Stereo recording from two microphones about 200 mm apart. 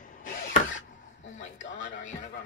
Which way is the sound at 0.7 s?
70° left (ahead or behind).